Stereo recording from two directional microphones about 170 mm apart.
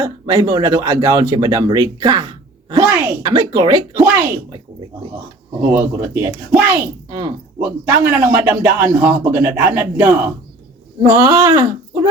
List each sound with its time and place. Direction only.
0.0 s speech: 25° right (ahead or behind)
4.0 s a man's voice: 15° right (ahead or behind)
5.7 s a man's voice: 15° right (ahead or behind)
11.0 s speech: 25° right (ahead or behind)